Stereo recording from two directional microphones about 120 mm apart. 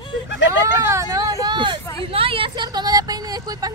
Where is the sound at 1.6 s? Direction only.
45° right (ahead or behind).